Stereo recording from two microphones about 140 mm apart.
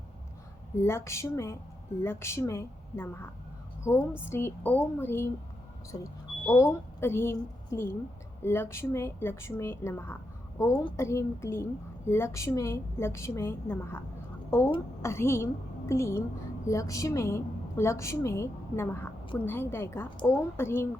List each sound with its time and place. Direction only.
0.8 s a woman's voice: 20° left (ahead or behind)